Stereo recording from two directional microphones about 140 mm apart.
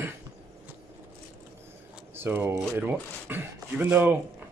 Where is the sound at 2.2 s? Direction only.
15° right (ahead or behind).